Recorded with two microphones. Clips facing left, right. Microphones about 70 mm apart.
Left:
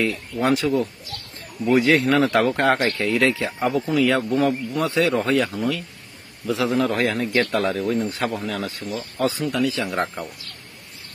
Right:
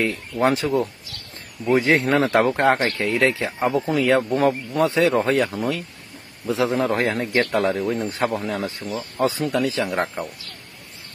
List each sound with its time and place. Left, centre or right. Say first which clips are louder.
0.0 s a man's voice: right 2 dB; right
7.8 s a man's voice: left 1 dB; centre
8.1 s speech: right 2 dB; right